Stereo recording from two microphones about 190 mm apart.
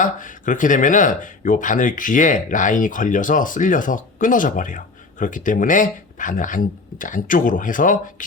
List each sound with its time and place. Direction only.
0.0 s speech: 45° left (ahead or behind)